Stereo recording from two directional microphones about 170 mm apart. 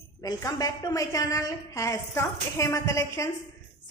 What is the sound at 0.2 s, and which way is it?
A woman's voice, 20° left (ahead or behind).